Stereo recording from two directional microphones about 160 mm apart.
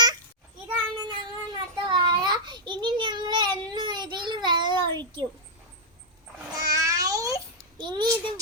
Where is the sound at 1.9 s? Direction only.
25° right (ahead or behind).